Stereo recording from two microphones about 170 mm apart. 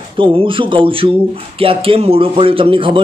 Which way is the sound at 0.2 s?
30° right (ahead or behind).